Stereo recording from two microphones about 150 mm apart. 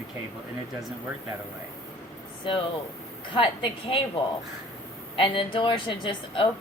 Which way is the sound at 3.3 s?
35° left (ahead or behind).